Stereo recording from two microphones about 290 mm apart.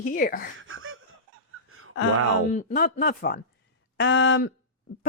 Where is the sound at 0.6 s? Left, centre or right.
Right.